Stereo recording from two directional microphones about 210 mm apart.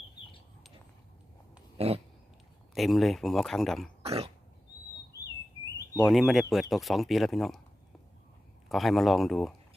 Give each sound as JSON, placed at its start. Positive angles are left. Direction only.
{"t": 1.8, "sound": "a sound", "side_deg": -30}
{"t": 2.7, "sound": "speech", "side_deg": 0}
{"t": 4.0, "sound": "cough", "side_deg": -30}
{"t": 6.1, "sound": "speech", "side_deg": 0}
{"t": 8.7, "sound": "speech", "side_deg": 0}